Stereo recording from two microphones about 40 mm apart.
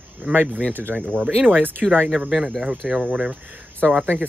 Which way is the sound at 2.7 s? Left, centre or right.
Right.